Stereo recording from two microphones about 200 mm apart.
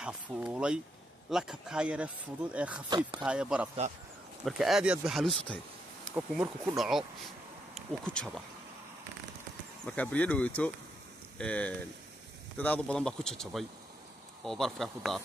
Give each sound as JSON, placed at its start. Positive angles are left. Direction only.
{"t": 0.0, "sound": "speech", "side_deg": -5}
{"t": 2.9, "sound": "speech", "side_deg": -25}
{"t": 3.3, "sound": "speech", "side_deg": -5}
{"t": 6.1, "sound": "speech", "side_deg": -10}
{"t": 6.8, "sound": "speech", "side_deg": 0}
{"t": 9.8, "sound": "speech", "side_deg": 5}